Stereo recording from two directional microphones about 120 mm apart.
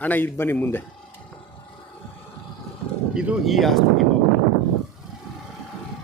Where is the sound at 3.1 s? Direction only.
5° right (ahead or behind).